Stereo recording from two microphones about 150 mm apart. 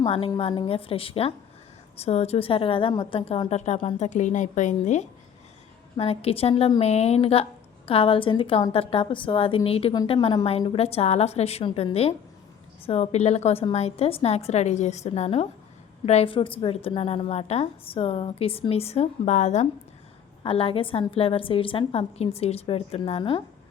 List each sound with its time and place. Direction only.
0.0 s a woman's voice: 35° left (ahead or behind); by 5.0 s 55° left (ahead or behind)
6.0 s a woman's voice: 40° left (ahead or behind)
20.4 s a woman's voice: 40° left (ahead or behind)